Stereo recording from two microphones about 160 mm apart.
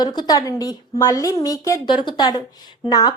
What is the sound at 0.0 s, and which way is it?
Speech, 25° left (ahead or behind).